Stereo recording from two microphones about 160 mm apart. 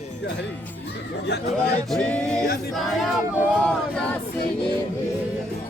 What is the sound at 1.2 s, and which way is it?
Speech, 90° left.